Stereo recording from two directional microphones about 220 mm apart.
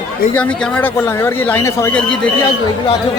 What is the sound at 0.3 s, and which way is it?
A man's voice, 5° left (ahead or behind).